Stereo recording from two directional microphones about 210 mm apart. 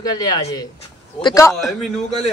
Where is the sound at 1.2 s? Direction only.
15° left (ahead or behind).